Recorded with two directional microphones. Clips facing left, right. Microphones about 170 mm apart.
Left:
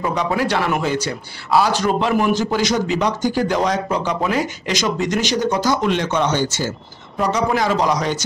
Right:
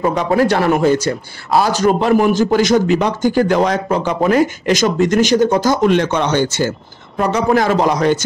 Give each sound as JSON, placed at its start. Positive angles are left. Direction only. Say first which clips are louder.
{"t": 0.0, "sound": "a man's voice", "louder": "right 6 dB", "side_deg": -45}